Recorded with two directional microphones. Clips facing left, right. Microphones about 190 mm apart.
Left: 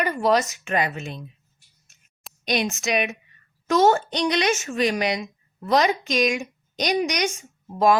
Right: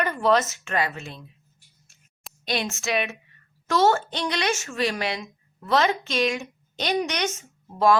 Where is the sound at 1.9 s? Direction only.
20° left (ahead or behind).